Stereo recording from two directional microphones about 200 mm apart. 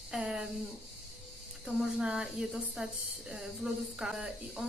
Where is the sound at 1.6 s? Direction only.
5° right (ahead or behind).